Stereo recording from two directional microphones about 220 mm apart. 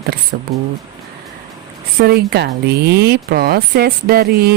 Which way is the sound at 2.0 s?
50° right (ahead or behind).